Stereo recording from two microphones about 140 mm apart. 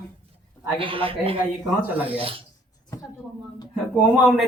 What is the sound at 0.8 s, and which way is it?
Speech, 40° right (ahead or behind).